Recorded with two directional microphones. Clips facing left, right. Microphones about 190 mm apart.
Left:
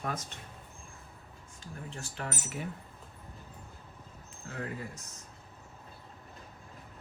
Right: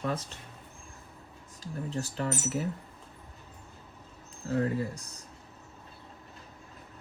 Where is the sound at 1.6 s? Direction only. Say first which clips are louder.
Right 9 dB; 35° right (ahead or behind).